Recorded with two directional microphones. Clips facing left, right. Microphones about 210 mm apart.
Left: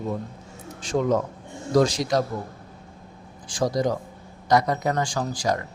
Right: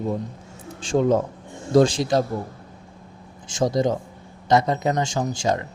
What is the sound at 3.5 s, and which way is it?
Speech, 25° right (ahead or behind).